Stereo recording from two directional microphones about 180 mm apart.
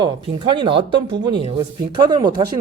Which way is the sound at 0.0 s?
25° right (ahead or behind).